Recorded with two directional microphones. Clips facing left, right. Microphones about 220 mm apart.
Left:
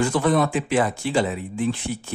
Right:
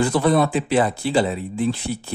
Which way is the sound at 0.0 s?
35° right (ahead or behind).